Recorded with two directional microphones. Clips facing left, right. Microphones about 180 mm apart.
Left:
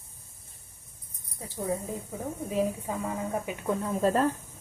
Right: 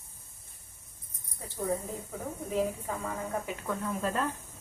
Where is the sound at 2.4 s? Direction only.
15° left (ahead or behind); by 4.2 s 35° left (ahead or behind).